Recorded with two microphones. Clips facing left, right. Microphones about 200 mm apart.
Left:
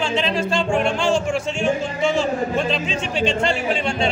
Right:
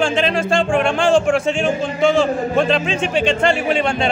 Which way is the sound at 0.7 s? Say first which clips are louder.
Right 3 dB; 90° right.